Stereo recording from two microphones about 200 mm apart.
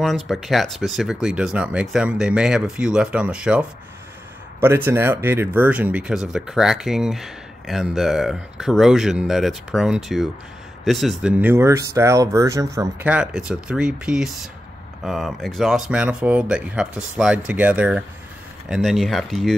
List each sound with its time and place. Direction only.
0.0 s speech: centre (ahead or behind)